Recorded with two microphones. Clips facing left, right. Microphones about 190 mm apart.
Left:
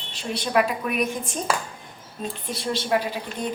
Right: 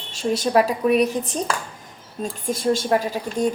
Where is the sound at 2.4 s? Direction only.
45° right (ahead or behind).